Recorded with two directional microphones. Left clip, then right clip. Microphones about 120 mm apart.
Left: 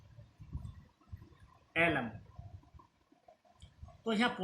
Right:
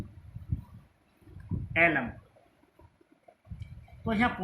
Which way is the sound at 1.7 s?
70° left (ahead or behind).